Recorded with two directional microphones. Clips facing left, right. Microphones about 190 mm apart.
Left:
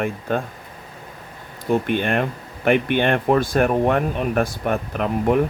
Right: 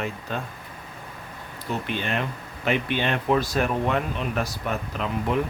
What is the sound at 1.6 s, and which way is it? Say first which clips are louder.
Speech: left 9 dB; 50° left (ahead or behind).